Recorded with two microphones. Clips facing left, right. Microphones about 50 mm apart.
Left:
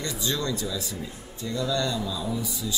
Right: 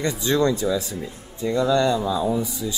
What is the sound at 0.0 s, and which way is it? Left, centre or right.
Speech, right.